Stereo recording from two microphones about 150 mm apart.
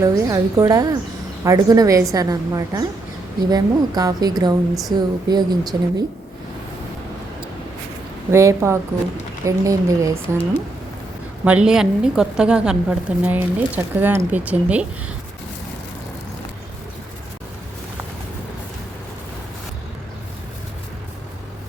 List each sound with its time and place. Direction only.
0.0 s a woman's voice: 20° right (ahead or behind)
8.3 s a woman's voice: 20° right (ahead or behind)
11.4 s a woman's voice: 5° right (ahead or behind)